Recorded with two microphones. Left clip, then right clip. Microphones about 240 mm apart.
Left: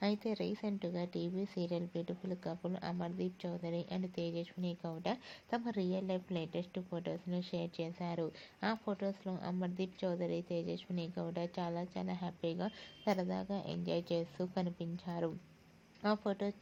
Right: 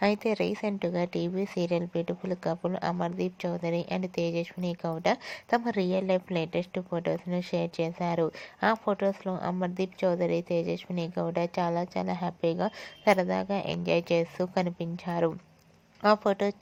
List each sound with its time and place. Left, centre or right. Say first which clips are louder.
0.0 s speech: right 11 dB; right
10.5 s a woman's voice: right 11 dB; right
11.1 s speech: right 13 dB; right